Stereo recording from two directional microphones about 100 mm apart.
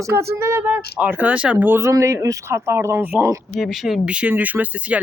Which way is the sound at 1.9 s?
35° right (ahead or behind).